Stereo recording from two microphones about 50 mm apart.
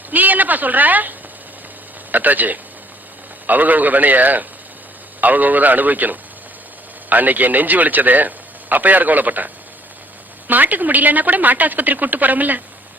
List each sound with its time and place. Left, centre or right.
0.1 s a sound: right
2.1 s a woman's voice: right
10.5 s a woman's voice: right